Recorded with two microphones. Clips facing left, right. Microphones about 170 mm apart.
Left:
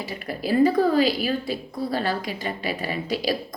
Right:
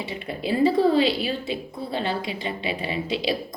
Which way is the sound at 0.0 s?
25° right (ahead or behind).